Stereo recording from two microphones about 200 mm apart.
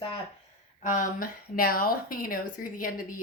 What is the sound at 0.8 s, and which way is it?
Speech, 40° left (ahead or behind).